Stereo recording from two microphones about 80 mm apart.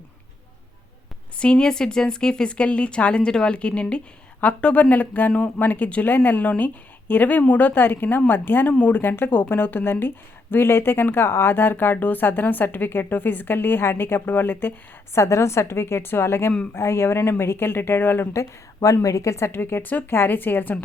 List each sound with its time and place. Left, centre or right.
1.4 s speech: centre
15.1 s a woman's voice: left
18.3 s a woman's voice: left
19.5 s speech: left